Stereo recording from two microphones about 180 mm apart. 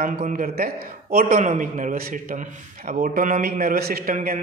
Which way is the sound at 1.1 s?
45° right (ahead or behind).